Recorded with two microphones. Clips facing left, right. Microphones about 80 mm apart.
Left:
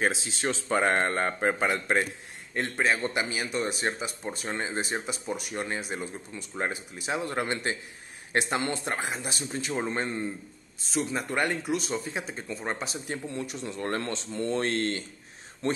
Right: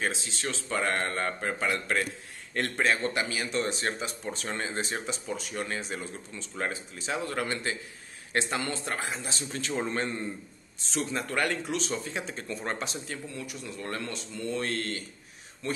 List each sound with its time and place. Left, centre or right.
0.4 s speech: left
2.5 s speech: centre
3.1 s speech: centre
11.2 s speech: left
11.6 s speech: centre
13.1 s speech: left
13.7 s speech: left